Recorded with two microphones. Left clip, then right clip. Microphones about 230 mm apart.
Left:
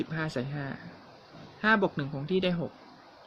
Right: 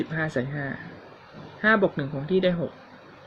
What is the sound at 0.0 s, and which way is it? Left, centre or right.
Speech, left.